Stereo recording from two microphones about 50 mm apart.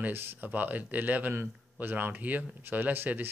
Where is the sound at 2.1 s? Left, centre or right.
Right.